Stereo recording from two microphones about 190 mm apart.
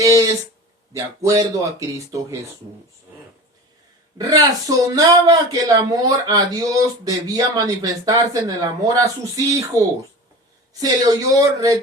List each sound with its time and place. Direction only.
0.0 s speech: 15° right (ahead or behind)
4.2 s speech: 20° right (ahead or behind)